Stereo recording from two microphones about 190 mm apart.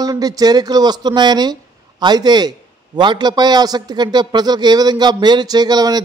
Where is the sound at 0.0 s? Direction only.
20° right (ahead or behind).